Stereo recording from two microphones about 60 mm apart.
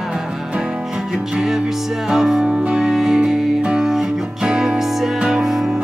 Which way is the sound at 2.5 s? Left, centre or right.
Centre.